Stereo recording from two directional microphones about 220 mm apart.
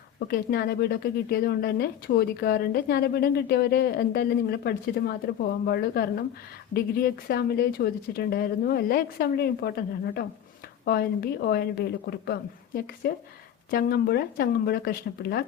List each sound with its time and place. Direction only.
0.2 s speech: 45° left (ahead or behind)